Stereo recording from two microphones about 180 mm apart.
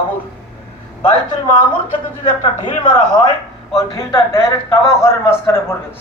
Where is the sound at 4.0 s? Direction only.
15° left (ahead or behind).